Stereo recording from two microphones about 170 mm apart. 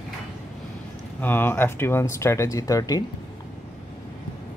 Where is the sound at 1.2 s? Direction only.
10° left (ahead or behind).